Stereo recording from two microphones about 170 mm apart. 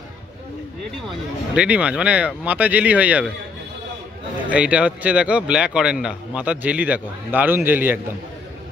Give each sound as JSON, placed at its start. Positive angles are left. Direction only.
{"t": 1.5, "sound": "a man's voice", "side_deg": -5}
{"t": 4.5, "sound": "a man's voice", "side_deg": -5}